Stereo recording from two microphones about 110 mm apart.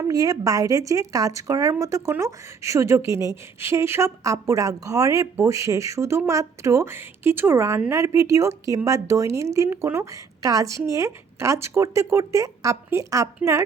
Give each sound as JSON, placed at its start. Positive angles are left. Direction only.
{"t": 0.0, "sound": "a woman's voice", "side_deg": -30}